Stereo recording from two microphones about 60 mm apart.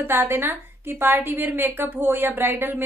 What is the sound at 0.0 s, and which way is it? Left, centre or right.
A woman's voice, right.